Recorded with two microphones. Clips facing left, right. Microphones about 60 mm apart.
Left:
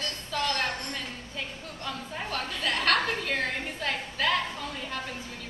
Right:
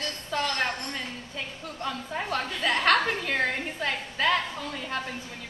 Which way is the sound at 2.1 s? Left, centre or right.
Right.